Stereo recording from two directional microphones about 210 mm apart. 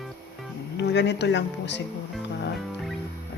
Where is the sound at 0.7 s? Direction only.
55° left (ahead or behind).